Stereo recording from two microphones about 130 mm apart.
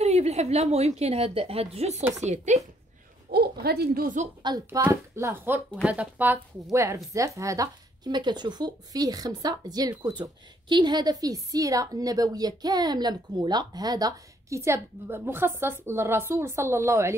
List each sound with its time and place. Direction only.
0.0 s a woman's voice: 55° right (ahead or behind)
4.0 s a woman's voice: 80° right
4.8 s speech: 20° right (ahead or behind)
6.7 s speech: 25° right (ahead or behind)